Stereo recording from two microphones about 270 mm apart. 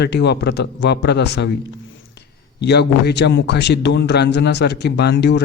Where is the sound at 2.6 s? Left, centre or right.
Left.